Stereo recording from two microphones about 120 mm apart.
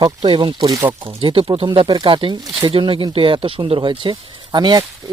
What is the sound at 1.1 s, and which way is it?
Speech, 50° right (ahead or behind).